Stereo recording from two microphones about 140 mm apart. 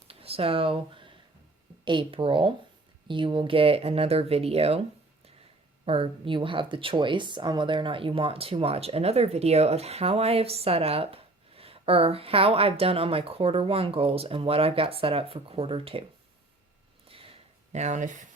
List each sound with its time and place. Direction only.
0.1 s a woman's voice: 45° right (ahead or behind)
5.8 s speech: 40° right (ahead or behind)
17.1 s a sound: 45° right (ahead or behind); by 18.3 s 65° right (ahead or behind)